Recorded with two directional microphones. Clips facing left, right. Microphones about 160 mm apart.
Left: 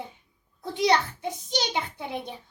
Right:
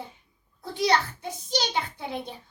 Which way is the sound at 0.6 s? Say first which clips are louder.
Left 2 dB; 20° left (ahead or behind).